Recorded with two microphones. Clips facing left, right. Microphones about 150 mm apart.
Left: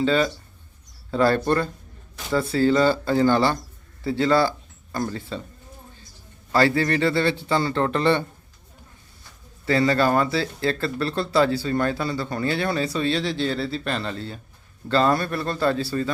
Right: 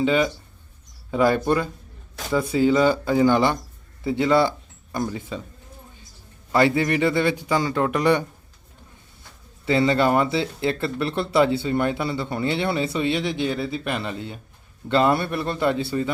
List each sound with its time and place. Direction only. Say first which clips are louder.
0.0 s a man's voice: even; 15° right (ahead or behind)
6.5 s a man's voice: right 1 dB; 20° right (ahead or behind)
9.6 s speech: right 1 dB; 20° right (ahead or behind)